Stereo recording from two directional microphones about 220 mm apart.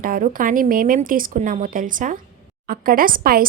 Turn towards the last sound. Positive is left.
turn(degrees=-40)  # may be behind; listen again after turning